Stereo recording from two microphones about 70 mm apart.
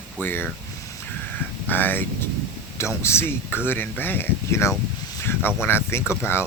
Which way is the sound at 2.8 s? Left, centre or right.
Left.